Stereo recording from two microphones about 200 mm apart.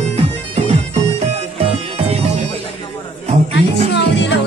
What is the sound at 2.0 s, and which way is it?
Music, 30° right (ahead or behind).